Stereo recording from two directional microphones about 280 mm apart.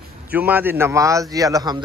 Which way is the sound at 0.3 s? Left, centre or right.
Centre.